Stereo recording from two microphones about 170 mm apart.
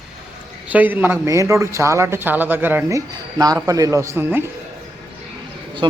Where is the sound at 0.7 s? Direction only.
10° right (ahead or behind).